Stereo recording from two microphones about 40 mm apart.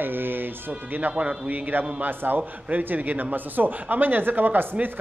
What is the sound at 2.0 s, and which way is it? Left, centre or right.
Speech, right.